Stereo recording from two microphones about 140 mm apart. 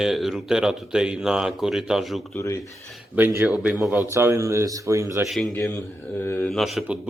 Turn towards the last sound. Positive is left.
turn(degrees=0)  # may be behind; listen again after turning